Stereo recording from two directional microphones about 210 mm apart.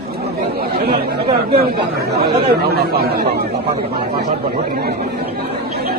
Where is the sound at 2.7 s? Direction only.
50° right (ahead or behind).